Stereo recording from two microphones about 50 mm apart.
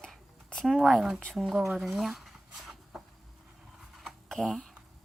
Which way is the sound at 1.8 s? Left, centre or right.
Centre.